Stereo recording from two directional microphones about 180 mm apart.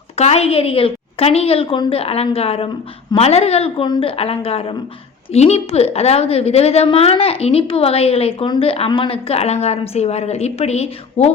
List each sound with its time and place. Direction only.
0.2 s a woman's voice: 35° left (ahead or behind)